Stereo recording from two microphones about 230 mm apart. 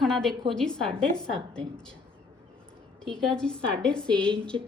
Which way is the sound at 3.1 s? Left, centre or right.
Centre.